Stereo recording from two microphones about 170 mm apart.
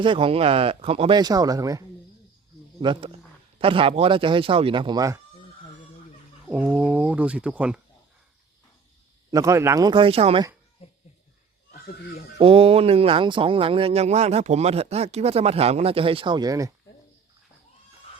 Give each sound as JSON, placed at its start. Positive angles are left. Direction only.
{"t": 0.0, "sound": "speech", "side_deg": -30}
{"t": 2.8, "sound": "speech", "side_deg": -30}
{"t": 6.5, "sound": "speech", "side_deg": -5}
{"t": 9.3, "sound": "speech", "side_deg": -20}
{"t": 12.4, "sound": "speech", "side_deg": -30}